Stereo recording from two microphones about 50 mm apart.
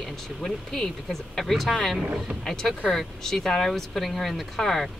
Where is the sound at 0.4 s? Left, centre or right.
Centre.